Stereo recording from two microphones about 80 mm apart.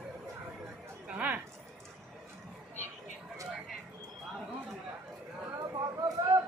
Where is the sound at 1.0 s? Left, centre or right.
Centre.